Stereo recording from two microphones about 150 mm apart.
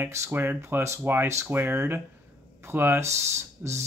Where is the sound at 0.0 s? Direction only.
15° right (ahead or behind).